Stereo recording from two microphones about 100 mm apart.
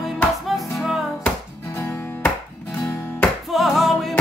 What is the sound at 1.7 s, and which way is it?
Music, 30° left (ahead or behind).